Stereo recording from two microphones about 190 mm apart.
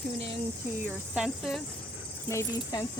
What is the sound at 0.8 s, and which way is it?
Speech, 5° right (ahead or behind).